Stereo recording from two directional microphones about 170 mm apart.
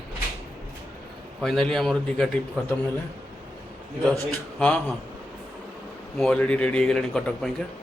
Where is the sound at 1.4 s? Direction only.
Centre (ahead or behind).